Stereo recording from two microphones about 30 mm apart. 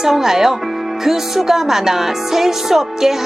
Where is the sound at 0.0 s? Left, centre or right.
Centre.